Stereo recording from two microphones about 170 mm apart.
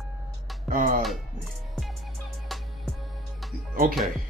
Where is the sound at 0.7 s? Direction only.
50° right (ahead or behind).